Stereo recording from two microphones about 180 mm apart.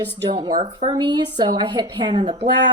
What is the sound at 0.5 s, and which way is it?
Speech, 40° right (ahead or behind).